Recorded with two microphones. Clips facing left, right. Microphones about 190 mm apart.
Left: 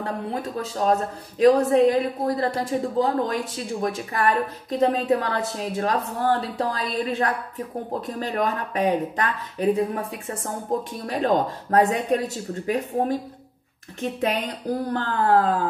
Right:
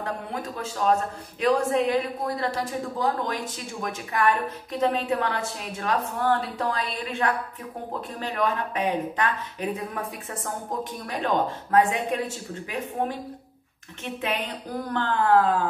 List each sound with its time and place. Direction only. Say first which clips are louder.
0.0 s a woman's voice: left 3 dB; 35° left (ahead or behind)
14.2 s a woman's voice: left 4 dB; 40° left (ahead or behind)